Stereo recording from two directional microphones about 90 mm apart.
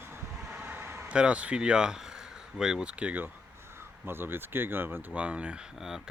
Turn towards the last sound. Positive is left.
turn(degrees=-5)  # may be behind; listen again after turning